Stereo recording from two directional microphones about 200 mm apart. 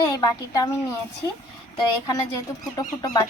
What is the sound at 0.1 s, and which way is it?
Speech, 20° left (ahead or behind).